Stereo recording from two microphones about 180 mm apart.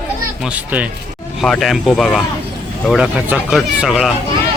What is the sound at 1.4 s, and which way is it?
Speech, centre (ahead or behind).